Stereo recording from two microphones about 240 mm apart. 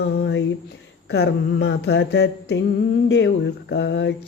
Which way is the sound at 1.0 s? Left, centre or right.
Left.